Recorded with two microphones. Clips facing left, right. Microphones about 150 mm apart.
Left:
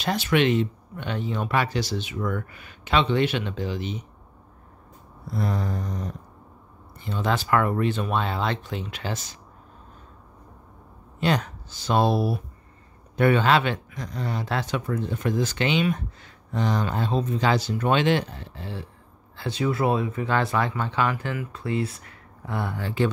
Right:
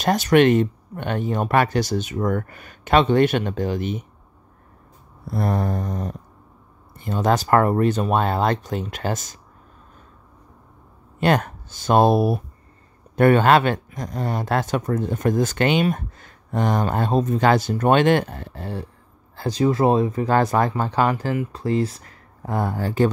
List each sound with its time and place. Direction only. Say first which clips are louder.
0.0 s speech: right 6 dB; 45° right (ahead or behind)
5.3 s mantra: right 5 dB; 55° right (ahead or behind)
7.0 s speech: right 6 dB; 45° right (ahead or behind)
11.1 s speech: right 5 dB; 55° right (ahead or behind)